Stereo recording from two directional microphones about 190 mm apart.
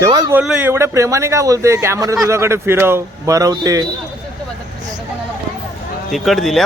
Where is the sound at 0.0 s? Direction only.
20° right (ahead or behind).